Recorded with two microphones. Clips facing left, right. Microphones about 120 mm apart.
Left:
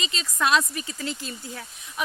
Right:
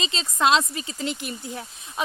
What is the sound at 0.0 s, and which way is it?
Speech, 25° right (ahead or behind).